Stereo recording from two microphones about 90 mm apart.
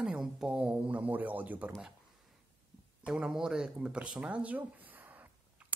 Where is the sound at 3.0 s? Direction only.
10° right (ahead or behind).